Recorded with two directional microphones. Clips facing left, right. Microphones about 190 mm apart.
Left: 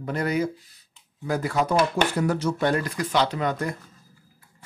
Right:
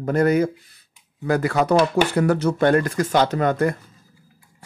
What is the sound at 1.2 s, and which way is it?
Speech, 70° right (ahead or behind).